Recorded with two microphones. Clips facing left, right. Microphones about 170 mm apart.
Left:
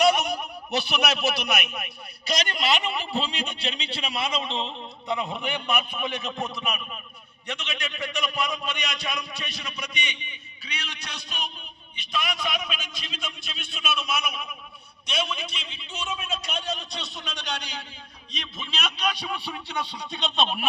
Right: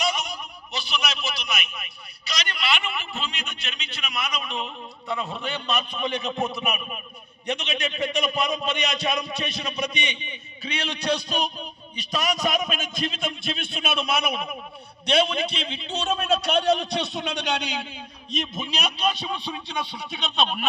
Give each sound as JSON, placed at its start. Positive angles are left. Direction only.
{"t": 0.0, "sound": "a man's voice", "side_deg": 60}
{"t": 18.5, "sound": "a man's voice", "side_deg": -40}